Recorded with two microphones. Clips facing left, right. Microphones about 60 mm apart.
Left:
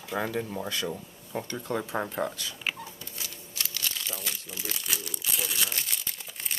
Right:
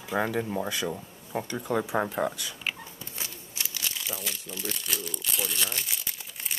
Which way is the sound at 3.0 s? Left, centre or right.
Right.